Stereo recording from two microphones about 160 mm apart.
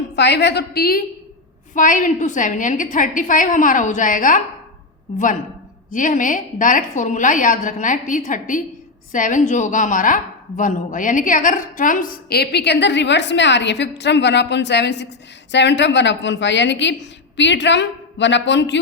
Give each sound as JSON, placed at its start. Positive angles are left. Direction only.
{"t": 0.2, "sound": "a woman's voice", "side_deg": 90}
{"t": 1.7, "sound": "a woman's voice", "side_deg": 55}